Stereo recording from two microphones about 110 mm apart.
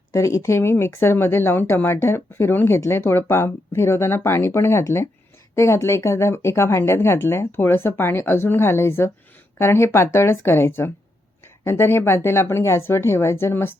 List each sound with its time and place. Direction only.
0.1 s speech: 30° left (ahead or behind)